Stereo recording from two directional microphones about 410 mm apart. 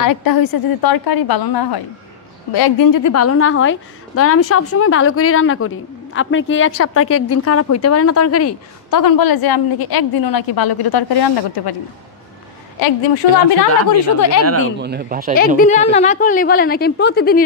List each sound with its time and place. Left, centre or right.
0.0 s a woman's voice: left
9.0 s a woman's voice: left
14.0 s a woman's voice: left
14.4 s speech: right
15.3 s a woman's voice: left